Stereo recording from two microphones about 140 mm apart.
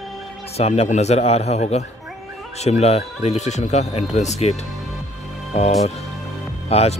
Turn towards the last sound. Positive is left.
turn(degrees=45)  # may be behind; listen again after turning